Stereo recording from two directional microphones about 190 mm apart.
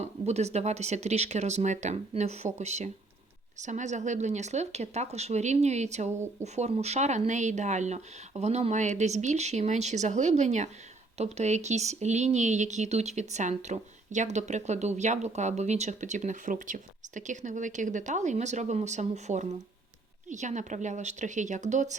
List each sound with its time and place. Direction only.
0.0 s speech: 35° right (ahead or behind)